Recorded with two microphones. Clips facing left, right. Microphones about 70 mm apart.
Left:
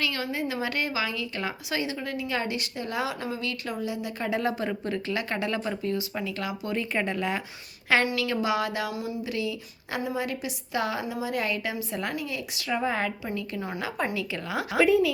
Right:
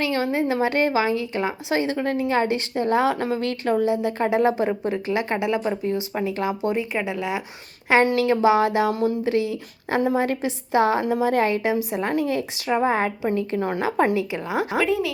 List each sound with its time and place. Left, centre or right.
0.0 s a woman's voice: right
4.3 s speech: right
6.9 s speech: centre
8.0 s a woman's voice: right
8.9 s a woman's voice: right
11.0 s a woman's voice: right
12.0 s a woman's voice: right
14.2 s speech: right
14.8 s speech: centre